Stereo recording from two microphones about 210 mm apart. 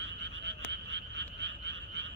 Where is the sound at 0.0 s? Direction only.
55° right (ahead or behind).